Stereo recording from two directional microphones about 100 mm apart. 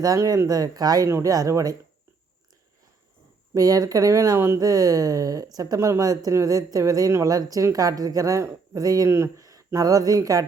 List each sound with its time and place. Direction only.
0.0 s a woman's voice: 35° right (ahead or behind)
3.5 s a woman's voice: 35° right (ahead or behind)